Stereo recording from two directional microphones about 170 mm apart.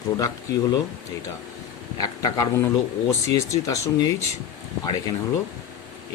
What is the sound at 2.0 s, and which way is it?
Speech, 20° left (ahead or behind).